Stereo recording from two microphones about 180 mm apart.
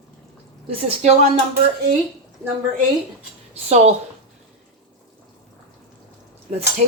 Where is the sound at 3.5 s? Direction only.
35° right (ahead or behind).